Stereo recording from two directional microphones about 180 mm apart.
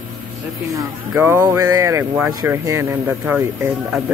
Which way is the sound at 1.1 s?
15° right (ahead or behind).